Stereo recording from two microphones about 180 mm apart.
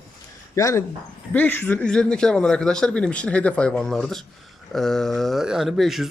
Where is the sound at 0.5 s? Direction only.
15° left (ahead or behind).